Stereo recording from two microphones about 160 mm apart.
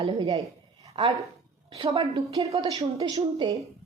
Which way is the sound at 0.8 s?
40° right (ahead or behind).